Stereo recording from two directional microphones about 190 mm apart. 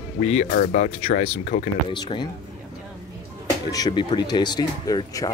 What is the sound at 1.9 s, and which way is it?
Speech, 25° left (ahead or behind).